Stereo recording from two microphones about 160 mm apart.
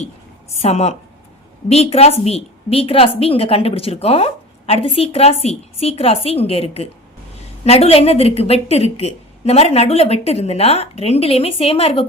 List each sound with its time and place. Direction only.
0.5 s a woman's voice: 40° left (ahead or behind)